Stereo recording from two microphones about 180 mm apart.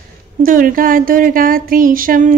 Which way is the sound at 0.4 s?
50° right (ahead or behind).